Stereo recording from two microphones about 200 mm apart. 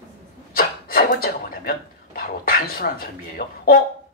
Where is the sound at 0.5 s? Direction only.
45° left (ahead or behind).